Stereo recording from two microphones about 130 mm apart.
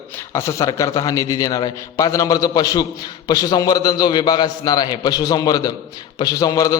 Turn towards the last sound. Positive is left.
turn(degrees=30)  # may be behind; listen again after turning